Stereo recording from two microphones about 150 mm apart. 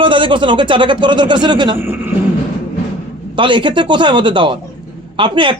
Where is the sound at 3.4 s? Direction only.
30° right (ahead or behind).